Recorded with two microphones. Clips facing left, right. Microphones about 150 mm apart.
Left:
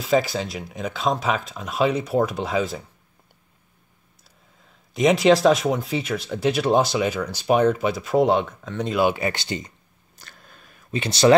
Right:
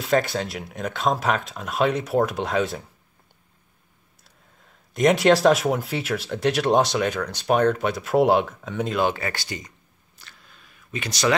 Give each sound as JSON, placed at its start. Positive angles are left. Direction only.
{"t": 0.0, "sound": "speech", "side_deg": 0}
{"t": 4.9, "sound": "speech", "side_deg": 0}
{"t": 8.9, "sound": "speech", "side_deg": 10}
{"t": 10.1, "sound": "a sound", "side_deg": 45}
{"t": 10.9, "sound": "speech", "side_deg": 30}